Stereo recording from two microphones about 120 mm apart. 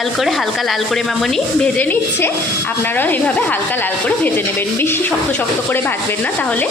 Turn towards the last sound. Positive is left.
turn(degrees=10)  # may be behind; listen again after turning